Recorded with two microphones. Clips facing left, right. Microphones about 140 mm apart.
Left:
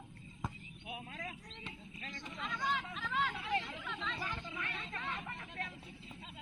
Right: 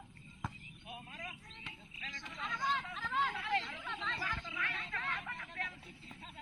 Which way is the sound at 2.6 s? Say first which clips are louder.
Even; 5° left (ahead or behind).